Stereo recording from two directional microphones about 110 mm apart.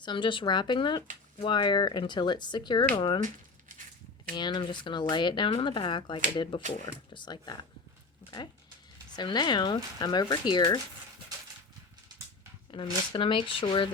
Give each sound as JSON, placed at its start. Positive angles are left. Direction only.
{"t": 0.0, "sound": "speech", "side_deg": 45}
{"t": 4.4, "sound": "speech", "side_deg": 45}
{"t": 9.1, "sound": "speech", "side_deg": 40}
{"t": 12.7, "sound": "speech", "side_deg": 50}